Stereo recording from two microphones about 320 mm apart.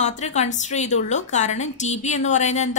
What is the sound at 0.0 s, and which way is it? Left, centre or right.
A woman's voice, left.